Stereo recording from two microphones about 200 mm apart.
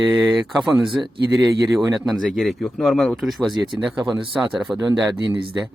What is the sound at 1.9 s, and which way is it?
Speech, centre (ahead or behind).